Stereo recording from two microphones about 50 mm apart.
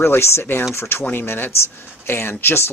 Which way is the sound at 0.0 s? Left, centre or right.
Left.